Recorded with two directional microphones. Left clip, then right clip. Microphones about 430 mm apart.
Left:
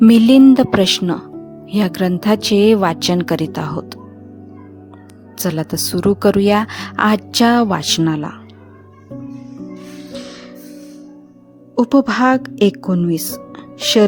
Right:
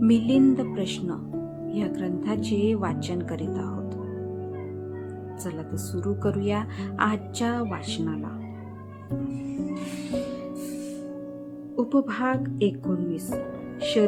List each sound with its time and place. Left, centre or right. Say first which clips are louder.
0.0 s a woman's voice: left 12 dB; left
5.4 s a woman's voice: left 18 dB; left
11.8 s a woman's voice: left 11 dB; left